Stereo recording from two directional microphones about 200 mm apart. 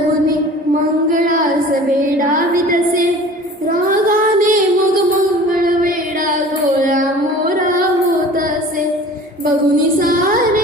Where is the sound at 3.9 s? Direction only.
40° right (ahead or behind).